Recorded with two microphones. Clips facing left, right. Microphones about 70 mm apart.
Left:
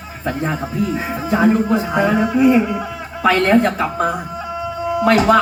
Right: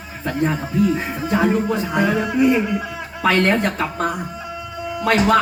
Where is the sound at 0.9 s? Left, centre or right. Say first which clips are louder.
Left 2 dB; centre.